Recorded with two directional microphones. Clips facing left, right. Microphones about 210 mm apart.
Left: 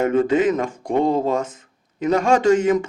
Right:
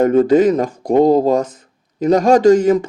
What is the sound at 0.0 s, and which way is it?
Speech, 40° right (ahead or behind).